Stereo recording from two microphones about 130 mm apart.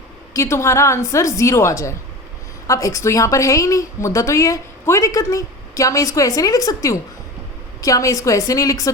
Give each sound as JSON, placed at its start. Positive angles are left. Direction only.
{"t": 0.3, "sound": "a woman's voice", "side_deg": 20}